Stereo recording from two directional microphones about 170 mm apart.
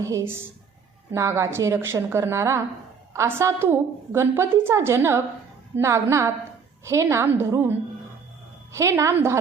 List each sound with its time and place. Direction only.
0.0 s a woman's voice: 20° right (ahead or behind)
8.7 s a woman's voice: 15° right (ahead or behind)